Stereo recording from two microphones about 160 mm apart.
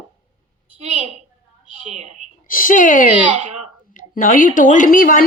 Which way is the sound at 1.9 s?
45° right (ahead or behind).